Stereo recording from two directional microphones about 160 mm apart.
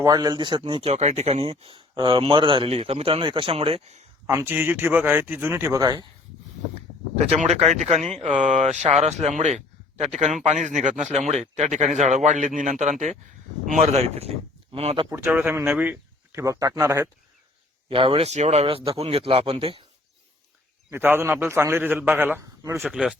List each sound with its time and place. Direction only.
0.0 s speech: 25° right (ahead or behind); by 4.0 s 40° right (ahead or behind)
4.3 s a man's voice: 15° right (ahead or behind)
7.3 s speech: 45° right (ahead or behind)
15.1 s a man's voice: 10° right (ahead or behind)
17.8 s speech: 35° right (ahead or behind)
20.9 s a man's voice: 15° right (ahead or behind)
22.8 s speech: centre (ahead or behind)